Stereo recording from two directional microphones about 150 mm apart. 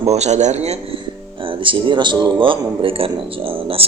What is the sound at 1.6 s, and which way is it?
Speech, 35° right (ahead or behind).